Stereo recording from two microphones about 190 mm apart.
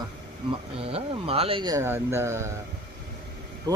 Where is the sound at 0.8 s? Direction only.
30° right (ahead or behind); by 2.5 s 15° right (ahead or behind).